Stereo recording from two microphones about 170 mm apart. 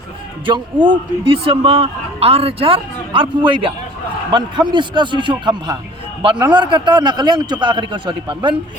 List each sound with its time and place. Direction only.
0.4 s a man's voice: 30° right (ahead or behind)